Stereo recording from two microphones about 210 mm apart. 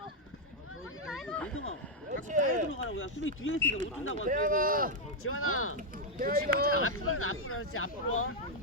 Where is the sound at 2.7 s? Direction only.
75° left (ahead or behind).